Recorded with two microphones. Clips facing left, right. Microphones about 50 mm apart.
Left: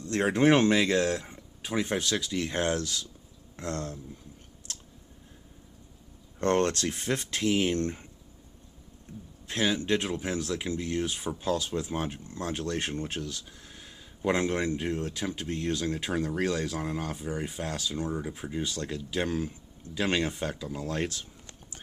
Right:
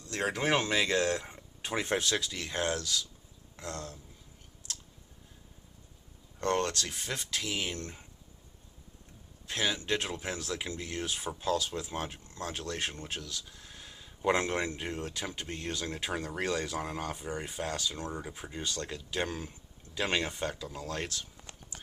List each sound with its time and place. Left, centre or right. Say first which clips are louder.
0.0 s speech: left 8 dB; left
0.7 s speech: left 3 dB; centre
2.3 s speech: left 5 dB; left
6.4 s speech: left 5 dB; left
9.5 s speech: left 4 dB; centre
11.4 s speech: left 2 dB; centre
13.7 s speech: left 1 dB; centre